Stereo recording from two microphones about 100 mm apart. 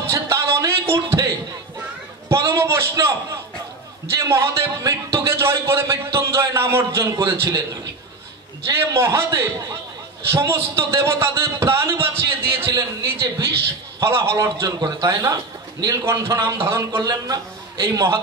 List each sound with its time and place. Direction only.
0.0 s music: 30° right (ahead or behind)
2.4 s a man's voice: 25° right (ahead or behind)